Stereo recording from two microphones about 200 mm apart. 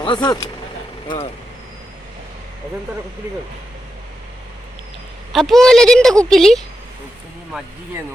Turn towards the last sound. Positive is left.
turn(degrees=0)  # may be behind; listen again after turning